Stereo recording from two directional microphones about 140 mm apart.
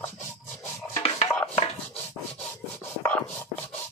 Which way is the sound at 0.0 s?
15° left (ahead or behind).